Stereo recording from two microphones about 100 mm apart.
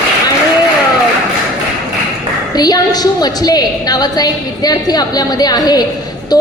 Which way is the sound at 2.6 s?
40° left (ahead or behind).